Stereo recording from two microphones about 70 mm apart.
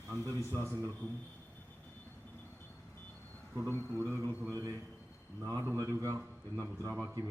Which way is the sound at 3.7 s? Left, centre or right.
Right.